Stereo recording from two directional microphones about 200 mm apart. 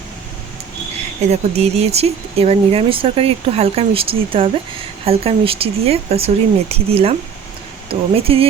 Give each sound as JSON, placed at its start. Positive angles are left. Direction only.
{"t": 1.3, "sound": "speech", "side_deg": -30}